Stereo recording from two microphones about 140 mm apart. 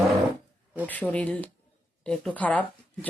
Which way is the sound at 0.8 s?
10° left (ahead or behind).